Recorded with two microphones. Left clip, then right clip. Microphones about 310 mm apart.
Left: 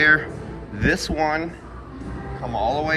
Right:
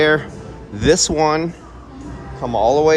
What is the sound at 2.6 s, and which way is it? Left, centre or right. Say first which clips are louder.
Speech: right 9 dB; right.